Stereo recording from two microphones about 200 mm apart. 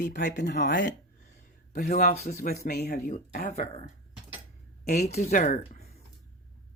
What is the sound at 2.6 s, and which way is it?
Speech, 50° left (ahead or behind).